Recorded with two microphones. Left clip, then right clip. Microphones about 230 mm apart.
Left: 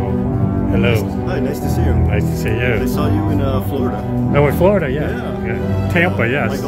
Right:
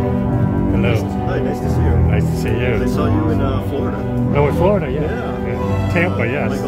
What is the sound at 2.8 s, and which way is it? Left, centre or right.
Speech, left.